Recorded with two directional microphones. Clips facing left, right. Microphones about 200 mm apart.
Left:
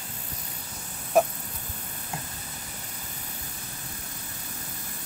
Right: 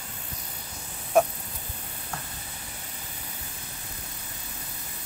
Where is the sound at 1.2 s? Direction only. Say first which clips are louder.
Even; centre (ahead or behind).